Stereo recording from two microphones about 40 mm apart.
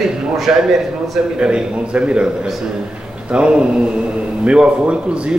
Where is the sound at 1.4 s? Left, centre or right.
Right.